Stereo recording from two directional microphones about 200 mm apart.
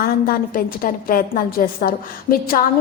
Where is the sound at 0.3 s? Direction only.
45° left (ahead or behind).